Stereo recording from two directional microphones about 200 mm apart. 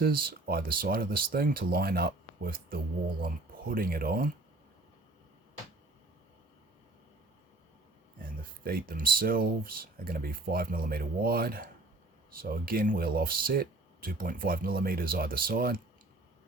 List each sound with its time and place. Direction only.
0.0 s speech: 50° right (ahead or behind)
8.2 s speech: 45° right (ahead or behind)